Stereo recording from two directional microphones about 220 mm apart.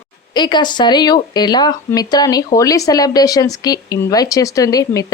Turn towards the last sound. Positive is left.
turn(degrees=15)  # may be behind; listen again after turning